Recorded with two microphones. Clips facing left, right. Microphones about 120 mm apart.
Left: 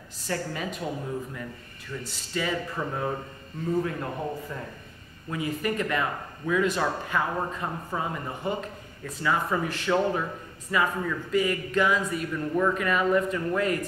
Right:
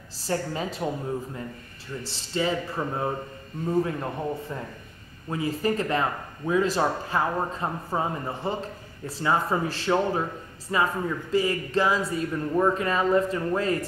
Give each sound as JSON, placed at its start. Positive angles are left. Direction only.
{"t": 0.3, "sound": "speech", "side_deg": -30}
{"t": 2.0, "sound": "a man's voice", "side_deg": -30}